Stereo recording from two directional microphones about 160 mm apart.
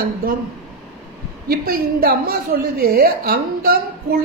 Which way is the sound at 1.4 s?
70° right (ahead or behind).